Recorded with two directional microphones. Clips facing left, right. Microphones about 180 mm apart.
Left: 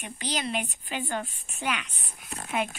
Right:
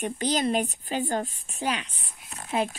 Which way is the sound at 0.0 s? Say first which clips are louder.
Right 7 dB; 45° right (ahead or behind).